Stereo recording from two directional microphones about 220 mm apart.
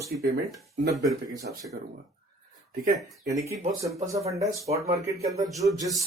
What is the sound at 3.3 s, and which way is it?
Speech, 15° right (ahead or behind).